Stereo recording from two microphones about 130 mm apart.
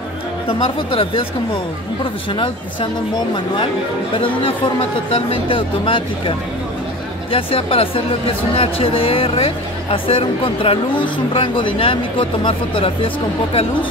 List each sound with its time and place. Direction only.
0.5 s speech: 45° left (ahead or behind)
2.3 s speech: 40° left (ahead or behind)
5.1 s speech: 45° left (ahead or behind)